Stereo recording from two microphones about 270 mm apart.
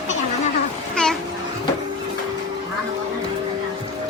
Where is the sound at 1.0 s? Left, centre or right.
Centre.